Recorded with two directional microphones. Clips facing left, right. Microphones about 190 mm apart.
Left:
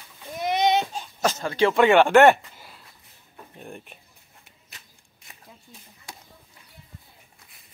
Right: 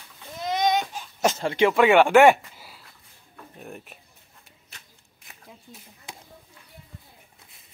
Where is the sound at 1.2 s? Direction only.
25° right (ahead or behind).